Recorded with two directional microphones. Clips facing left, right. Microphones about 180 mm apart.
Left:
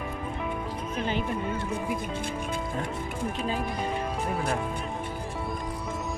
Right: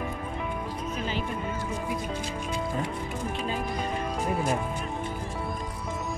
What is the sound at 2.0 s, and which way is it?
Speech, 55° left (ahead or behind).